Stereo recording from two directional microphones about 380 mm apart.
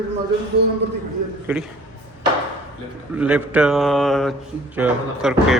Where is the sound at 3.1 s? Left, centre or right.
Centre.